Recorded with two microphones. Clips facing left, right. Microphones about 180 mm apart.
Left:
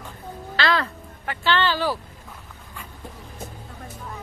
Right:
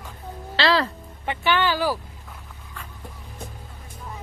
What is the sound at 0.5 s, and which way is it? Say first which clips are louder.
Speech: right 2 dB; 30° right (ahead or behind).